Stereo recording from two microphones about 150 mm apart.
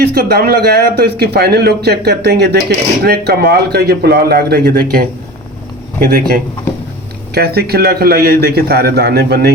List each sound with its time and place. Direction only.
0.0 s a man's voice: 90° right